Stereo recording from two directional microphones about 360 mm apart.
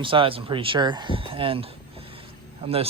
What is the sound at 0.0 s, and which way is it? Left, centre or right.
Speech, centre.